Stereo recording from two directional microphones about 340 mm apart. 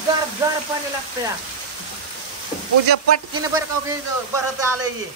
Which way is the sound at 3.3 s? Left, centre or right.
Centre.